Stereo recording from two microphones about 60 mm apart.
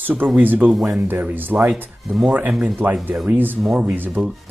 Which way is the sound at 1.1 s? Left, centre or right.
Right.